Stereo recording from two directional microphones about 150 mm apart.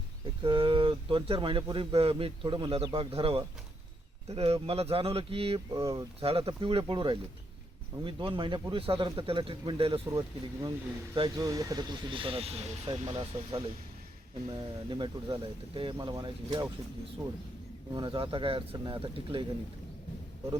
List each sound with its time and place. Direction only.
0.4 s speech: 35° right (ahead or behind)
5.7 s speech: 25° right (ahead or behind)
6.1 s speech: 40° right (ahead or behind)
7.9 s speech: 25° right (ahead or behind); by 12.9 s 40° right (ahead or behind)
12.9 s speech: 30° right (ahead or behind)
17.9 s speech: 35° right (ahead or behind)